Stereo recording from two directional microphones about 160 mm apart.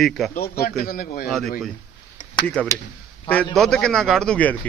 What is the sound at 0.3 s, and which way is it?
Speech, 70° left (ahead or behind).